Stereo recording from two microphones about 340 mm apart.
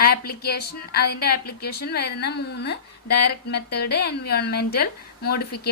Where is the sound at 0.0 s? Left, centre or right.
Left.